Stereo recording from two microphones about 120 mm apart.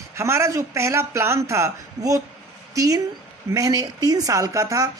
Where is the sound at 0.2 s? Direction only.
25° right (ahead or behind).